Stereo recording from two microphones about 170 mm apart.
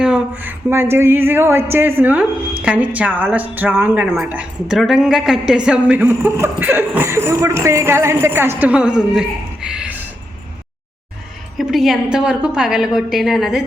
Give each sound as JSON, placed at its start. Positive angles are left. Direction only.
{"t": 0.0, "sound": "a woman's voice", "side_deg": -10}
{"t": 11.5, "sound": "a woman's voice", "side_deg": 0}